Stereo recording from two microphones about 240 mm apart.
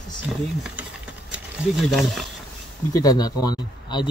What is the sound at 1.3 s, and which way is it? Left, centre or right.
Speech, centre.